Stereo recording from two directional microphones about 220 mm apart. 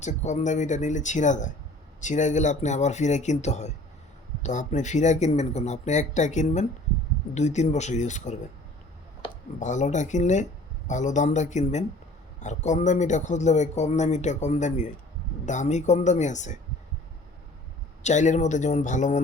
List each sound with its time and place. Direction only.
0.0 s a man's voice: 30° left (ahead or behind)
18.0 s a man's voice: 35° left (ahead or behind)